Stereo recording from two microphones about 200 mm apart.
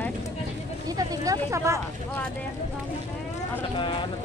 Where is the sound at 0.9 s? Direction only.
20° right (ahead or behind).